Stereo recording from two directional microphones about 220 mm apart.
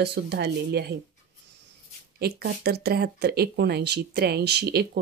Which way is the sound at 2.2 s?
45° right (ahead or behind).